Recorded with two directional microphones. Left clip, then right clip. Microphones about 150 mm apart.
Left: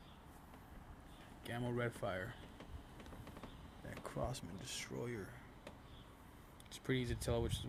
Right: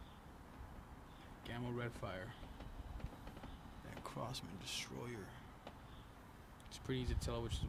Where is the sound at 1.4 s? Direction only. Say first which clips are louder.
Left 4 dB; 45° left (ahead or behind).